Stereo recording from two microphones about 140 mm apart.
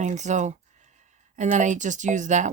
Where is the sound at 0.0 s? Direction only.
55° right (ahead or behind).